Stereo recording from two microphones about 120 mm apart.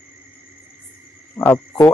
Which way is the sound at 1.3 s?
15° left (ahead or behind).